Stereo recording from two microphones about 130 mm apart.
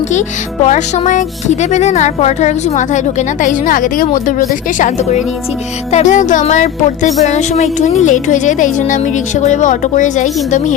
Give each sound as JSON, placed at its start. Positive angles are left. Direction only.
{"t": 0.1, "sound": "speech", "side_deg": 65}
{"t": 5.9, "sound": "speech", "side_deg": 70}